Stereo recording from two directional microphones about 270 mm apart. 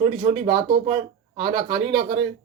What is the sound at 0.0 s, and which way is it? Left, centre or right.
Speech, right.